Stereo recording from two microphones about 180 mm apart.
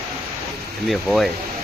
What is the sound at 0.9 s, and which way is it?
Speech, centre (ahead or behind).